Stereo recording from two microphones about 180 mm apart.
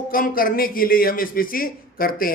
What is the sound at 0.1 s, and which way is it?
A man's voice, 55° left (ahead or behind).